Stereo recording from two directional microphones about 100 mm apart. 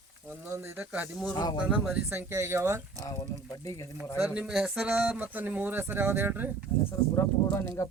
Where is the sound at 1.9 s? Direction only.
20° right (ahead or behind).